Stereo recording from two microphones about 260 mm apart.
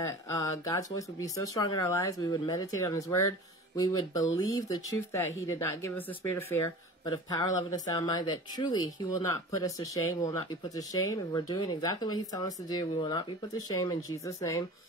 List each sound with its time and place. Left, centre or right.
0.0 s speech: centre